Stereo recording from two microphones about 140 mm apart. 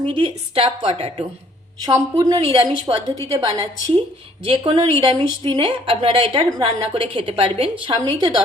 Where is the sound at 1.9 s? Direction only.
25° right (ahead or behind).